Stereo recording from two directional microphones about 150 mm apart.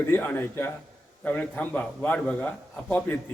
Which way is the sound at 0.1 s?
15° left (ahead or behind).